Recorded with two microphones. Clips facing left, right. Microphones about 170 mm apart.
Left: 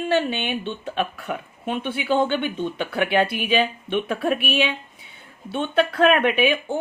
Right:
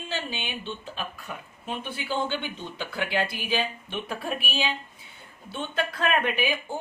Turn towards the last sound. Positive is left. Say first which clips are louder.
# left 7 dB
turn(degrees=70)  # may be behind; listen again after turning